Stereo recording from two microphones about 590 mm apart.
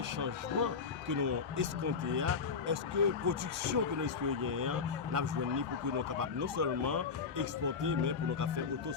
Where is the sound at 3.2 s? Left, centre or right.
Right.